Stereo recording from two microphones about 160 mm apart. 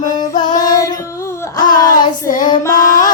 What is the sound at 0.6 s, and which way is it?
Child singing, 25° left (ahead or behind).